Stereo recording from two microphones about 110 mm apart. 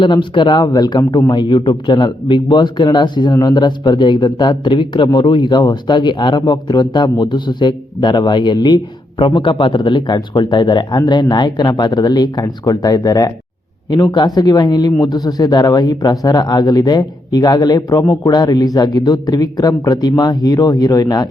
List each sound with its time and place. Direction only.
0.0 s a man's voice: 50° left (ahead or behind)